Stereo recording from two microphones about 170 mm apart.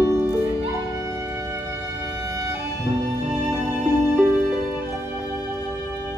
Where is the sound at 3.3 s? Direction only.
10° right (ahead or behind).